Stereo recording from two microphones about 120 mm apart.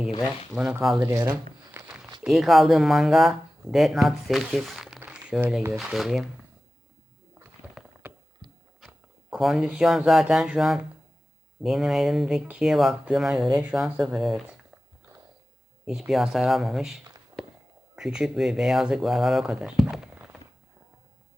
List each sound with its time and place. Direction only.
0.2 s speech: 5° right (ahead or behind)
1.0 s speech: 20° right (ahead or behind)
1.9 s a sound: 5° right (ahead or behind)
2.2 s speech: centre (ahead or behind)
4.9 s a sound: 10° right (ahead or behind)
5.7 s speech: centre (ahead or behind)
7.6 s rowboat: 15° right (ahead or behind)
8.4 s a sound: 35° right (ahead or behind)
8.9 s speech: 5° right (ahead or behind)
15.9 s speech: 5° right (ahead or behind)